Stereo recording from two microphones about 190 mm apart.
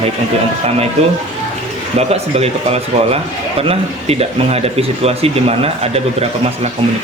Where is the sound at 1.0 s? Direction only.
35° right (ahead or behind).